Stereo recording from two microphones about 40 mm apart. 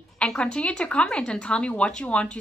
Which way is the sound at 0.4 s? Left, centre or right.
Left.